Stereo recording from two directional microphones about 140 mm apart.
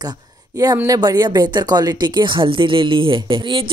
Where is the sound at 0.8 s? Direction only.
25° right (ahead or behind).